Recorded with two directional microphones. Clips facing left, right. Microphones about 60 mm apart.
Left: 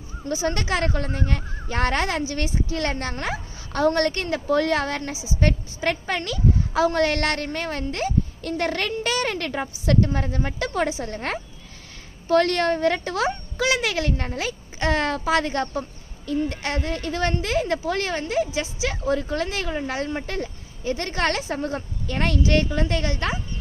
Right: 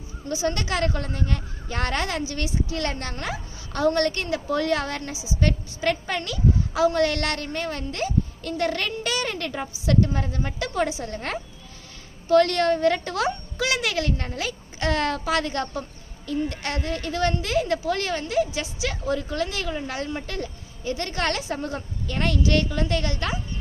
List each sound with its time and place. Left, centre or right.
0.3 s speech: left
9.3 s a woman's voice: left